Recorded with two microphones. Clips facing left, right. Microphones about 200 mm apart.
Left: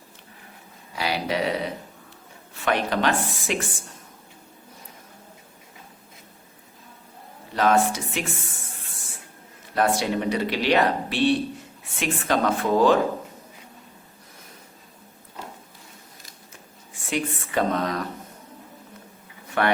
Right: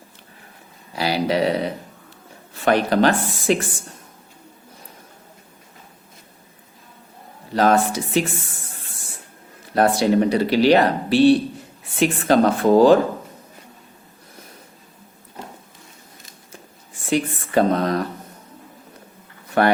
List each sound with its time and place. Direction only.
0.9 s speech: 35° right (ahead or behind)
2.6 s speech: 35° right (ahead or behind)
7.5 s speech: 35° right (ahead or behind)
9.7 s speech: 35° right (ahead or behind)
17.1 s speech: 35° right (ahead or behind)
19.6 s speech: 40° right (ahead or behind)